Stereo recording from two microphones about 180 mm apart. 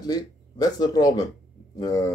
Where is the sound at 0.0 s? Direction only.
20° left (ahead or behind).